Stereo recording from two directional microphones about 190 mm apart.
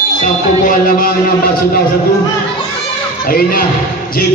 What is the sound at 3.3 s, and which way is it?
Speech, 50° left (ahead or behind).